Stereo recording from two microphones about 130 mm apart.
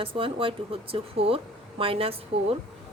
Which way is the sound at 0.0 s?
45° right (ahead or behind).